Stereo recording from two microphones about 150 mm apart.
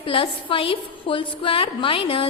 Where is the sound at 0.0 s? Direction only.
35° left (ahead or behind).